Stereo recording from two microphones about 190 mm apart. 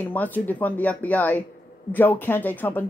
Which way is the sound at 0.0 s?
10° left (ahead or behind).